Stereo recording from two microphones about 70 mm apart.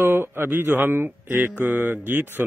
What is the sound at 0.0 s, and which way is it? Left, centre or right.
A man's voice, right.